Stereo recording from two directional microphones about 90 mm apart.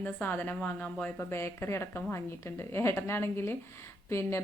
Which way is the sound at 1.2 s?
30° left (ahead or behind).